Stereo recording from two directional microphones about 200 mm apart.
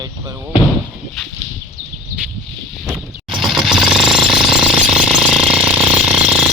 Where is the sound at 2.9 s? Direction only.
Centre (ahead or behind).